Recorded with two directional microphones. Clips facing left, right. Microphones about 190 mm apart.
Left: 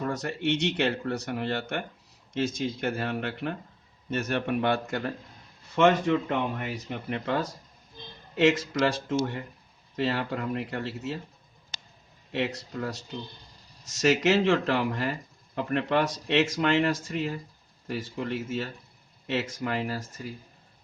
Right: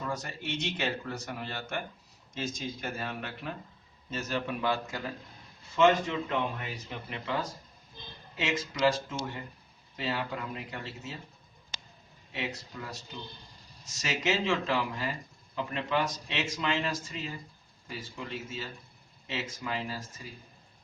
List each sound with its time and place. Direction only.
0.0 s speech: 65° left (ahead or behind)
12.3 s speech: 60° left (ahead or behind)